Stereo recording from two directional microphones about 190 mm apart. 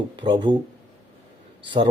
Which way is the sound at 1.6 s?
25° right (ahead or behind).